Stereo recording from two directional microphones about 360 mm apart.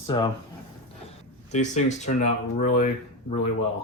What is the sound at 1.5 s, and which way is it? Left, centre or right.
Speech, centre.